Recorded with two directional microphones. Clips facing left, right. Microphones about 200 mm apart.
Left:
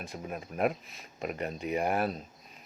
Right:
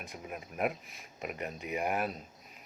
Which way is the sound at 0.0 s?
30° left (ahead or behind).